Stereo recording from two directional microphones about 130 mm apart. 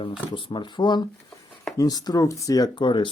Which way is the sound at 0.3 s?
40° left (ahead or behind).